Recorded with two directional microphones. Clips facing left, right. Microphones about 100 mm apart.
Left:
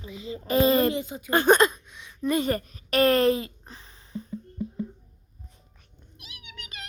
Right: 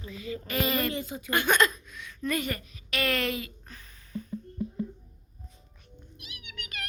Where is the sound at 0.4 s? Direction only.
30° left (ahead or behind).